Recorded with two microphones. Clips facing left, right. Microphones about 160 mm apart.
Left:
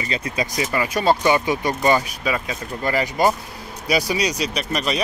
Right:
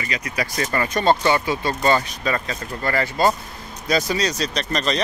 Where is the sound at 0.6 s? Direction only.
10° left (ahead or behind).